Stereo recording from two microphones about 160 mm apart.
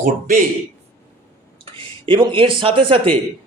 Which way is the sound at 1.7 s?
30° right (ahead or behind).